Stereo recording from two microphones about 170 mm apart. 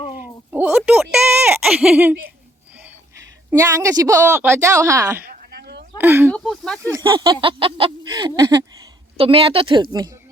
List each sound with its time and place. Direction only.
0.1 s a sound: 10° right (ahead or behind)
1.6 s a woman's voice: 5° right (ahead or behind)
5.2 s a sound: 60° right (ahead or behind)
6.0 s speech: 10° right (ahead or behind)
6.3 s speech: centre (ahead or behind)
6.8 s speech: 20° right (ahead or behind)
9.1 s a woman's voice: 35° right (ahead or behind)